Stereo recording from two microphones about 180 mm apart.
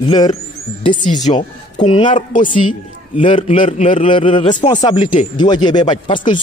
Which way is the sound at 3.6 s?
45° left (ahead or behind).